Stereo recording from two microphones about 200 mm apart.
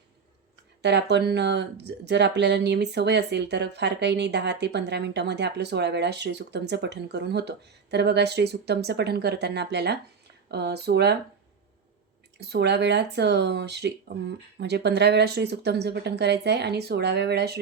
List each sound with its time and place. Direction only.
0.8 s speech: 60° right (ahead or behind)
12.4 s speech: 55° right (ahead or behind)